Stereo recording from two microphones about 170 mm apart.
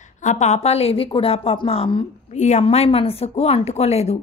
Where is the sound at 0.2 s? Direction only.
45° left (ahead or behind).